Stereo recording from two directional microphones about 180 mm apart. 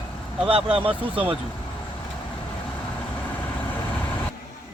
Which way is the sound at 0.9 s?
5° right (ahead or behind).